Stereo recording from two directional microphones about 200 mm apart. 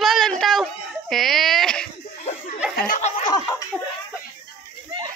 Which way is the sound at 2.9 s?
35° left (ahead or behind).